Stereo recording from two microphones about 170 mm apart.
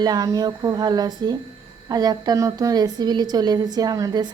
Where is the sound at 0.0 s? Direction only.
20° right (ahead or behind).